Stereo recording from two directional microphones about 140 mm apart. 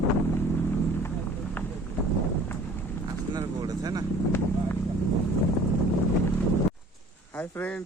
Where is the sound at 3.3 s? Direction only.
25° right (ahead or behind).